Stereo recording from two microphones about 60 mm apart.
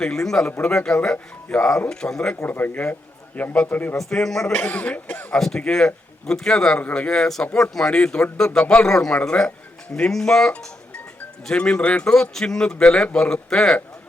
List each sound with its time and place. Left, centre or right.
0.0 s speech: centre
0.9 s speech: left
1.9 s speech: centre
2.5 s speech: left
3.9 s speech: centre
4.5 s speech: left
5.4 s speech: centre
11.5 s speech: centre